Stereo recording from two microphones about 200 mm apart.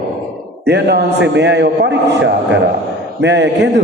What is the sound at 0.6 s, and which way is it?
A man's voice, 55° right (ahead or behind).